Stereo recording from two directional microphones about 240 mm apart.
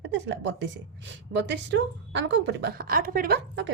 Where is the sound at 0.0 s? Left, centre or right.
Right.